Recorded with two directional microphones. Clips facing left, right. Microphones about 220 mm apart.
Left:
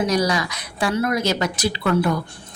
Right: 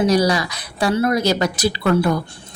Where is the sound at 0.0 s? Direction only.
35° right (ahead or behind).